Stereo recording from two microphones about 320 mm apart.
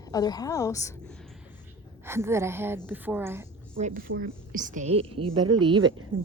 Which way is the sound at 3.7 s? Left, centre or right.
Right.